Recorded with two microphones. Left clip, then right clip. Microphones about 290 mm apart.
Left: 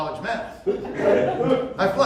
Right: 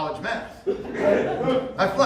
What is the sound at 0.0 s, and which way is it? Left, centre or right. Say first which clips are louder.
Chuckle: left 1 dB; centre.